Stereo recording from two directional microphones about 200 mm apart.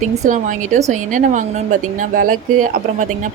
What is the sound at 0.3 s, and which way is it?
Speech, 40° right (ahead or behind).